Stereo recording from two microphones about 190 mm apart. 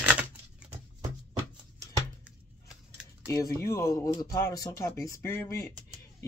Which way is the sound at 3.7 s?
15° left (ahead or behind).